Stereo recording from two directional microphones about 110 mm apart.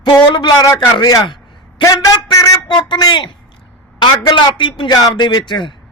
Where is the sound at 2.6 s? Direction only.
45° left (ahead or behind).